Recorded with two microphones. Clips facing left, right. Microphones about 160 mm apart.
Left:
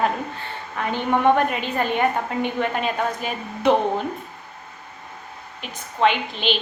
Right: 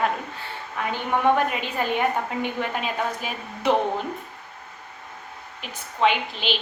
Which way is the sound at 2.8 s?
55° left (ahead or behind).